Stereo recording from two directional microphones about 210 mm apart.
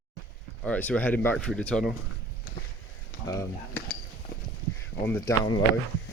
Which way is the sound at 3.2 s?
15° left (ahead or behind).